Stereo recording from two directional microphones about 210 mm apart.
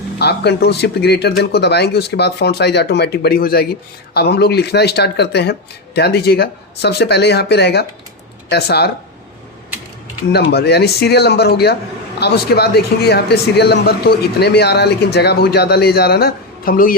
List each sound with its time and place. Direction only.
0.2 s speech: 50° left (ahead or behind)
10.3 s speech: 50° left (ahead or behind)